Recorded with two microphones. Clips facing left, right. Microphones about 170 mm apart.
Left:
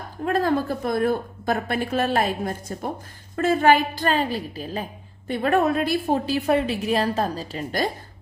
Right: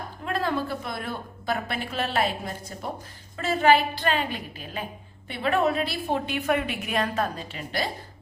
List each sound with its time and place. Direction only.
0.3 s a woman's voice: 45° left (ahead or behind)